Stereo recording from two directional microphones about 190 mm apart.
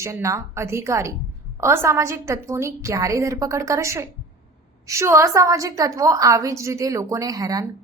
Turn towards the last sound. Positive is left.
turn(degrees=-20)  # may be behind; listen again after turning